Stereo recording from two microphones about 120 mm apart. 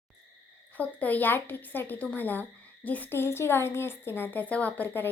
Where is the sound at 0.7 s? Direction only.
15° left (ahead or behind).